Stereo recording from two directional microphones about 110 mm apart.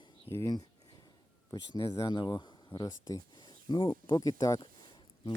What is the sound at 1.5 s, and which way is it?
Speech, 35° left (ahead or behind).